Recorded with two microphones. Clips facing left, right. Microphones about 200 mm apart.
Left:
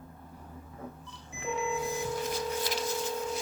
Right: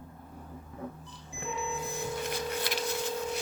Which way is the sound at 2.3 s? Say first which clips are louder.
Left 1 dB; 65° right (ahead or behind).